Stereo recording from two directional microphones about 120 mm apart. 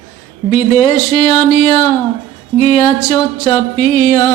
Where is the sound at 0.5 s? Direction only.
65° left (ahead or behind).